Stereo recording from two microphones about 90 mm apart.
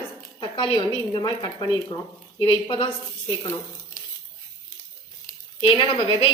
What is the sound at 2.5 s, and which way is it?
Speech, 70° left (ahead or behind).